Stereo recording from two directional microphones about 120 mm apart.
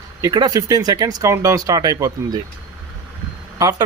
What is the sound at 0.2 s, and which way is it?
Speech, 35° right (ahead or behind).